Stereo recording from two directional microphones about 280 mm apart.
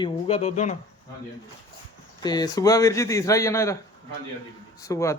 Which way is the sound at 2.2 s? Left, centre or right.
Centre.